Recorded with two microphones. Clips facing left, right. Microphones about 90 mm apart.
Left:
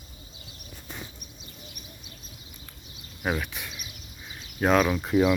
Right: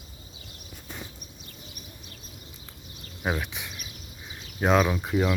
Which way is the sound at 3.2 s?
15° right (ahead or behind).